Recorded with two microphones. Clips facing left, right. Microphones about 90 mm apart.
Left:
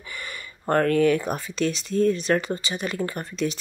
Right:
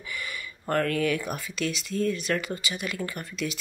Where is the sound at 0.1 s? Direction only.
40° left (ahead or behind).